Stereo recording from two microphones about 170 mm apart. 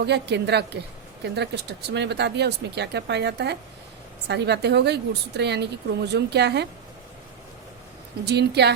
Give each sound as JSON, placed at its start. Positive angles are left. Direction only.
{"t": 0.0, "sound": "speech", "side_deg": -80}
{"t": 8.2, "sound": "a woman's voice", "side_deg": -75}